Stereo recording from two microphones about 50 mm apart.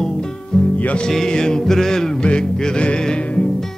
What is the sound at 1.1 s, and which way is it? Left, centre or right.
Music, centre.